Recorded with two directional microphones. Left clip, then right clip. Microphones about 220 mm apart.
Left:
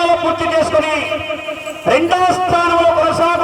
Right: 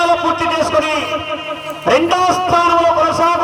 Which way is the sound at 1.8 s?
40° right (ahead or behind).